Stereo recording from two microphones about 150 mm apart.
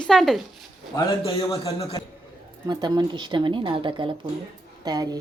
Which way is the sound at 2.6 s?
25° right (ahead or behind).